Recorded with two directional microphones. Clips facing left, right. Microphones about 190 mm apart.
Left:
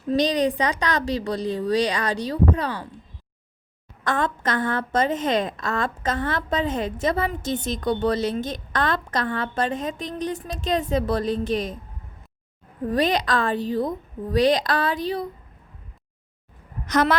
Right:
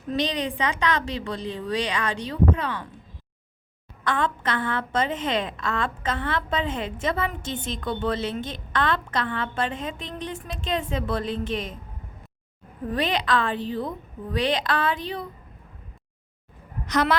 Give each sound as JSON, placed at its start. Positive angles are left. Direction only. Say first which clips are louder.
{"t": 0.1, "sound": "a woman's voice", "louder": "left 6 dB", "side_deg": 40}
{"t": 4.0, "sound": "a woman's voice", "louder": "left 1 dB", "side_deg": 40}
{"t": 12.9, "sound": "a woman's voice", "louder": "left 3 dB", "side_deg": 40}
{"t": 16.8, "sound": "a woman's voice", "louder": "left 2 dB", "side_deg": 45}